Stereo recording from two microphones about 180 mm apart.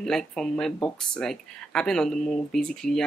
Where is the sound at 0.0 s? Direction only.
5° left (ahead or behind).